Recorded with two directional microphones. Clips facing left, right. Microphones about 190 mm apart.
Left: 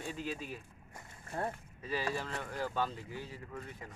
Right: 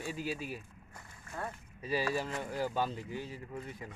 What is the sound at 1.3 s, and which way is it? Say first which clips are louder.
Speech: left 4 dB; 35° left (ahead or behind).